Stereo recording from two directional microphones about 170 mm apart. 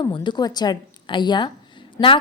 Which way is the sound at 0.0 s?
25° left (ahead or behind).